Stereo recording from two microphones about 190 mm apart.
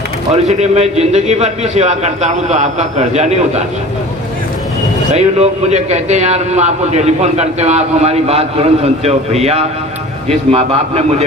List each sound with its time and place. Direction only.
0.3 s a man's voice: 35° right (ahead or behind)
5.1 s a man's voice: 35° right (ahead or behind)